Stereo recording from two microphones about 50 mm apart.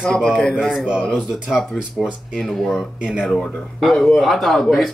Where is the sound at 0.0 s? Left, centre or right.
Centre.